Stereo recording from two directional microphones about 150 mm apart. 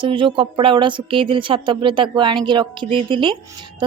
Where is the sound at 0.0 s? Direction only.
35° right (ahead or behind).